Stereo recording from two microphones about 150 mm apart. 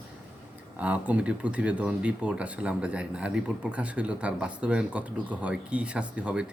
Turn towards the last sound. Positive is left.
turn(degrees=-5)  # may be behind; listen again after turning